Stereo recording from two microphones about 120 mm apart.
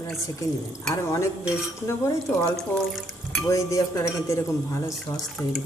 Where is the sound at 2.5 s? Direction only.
Centre (ahead or behind).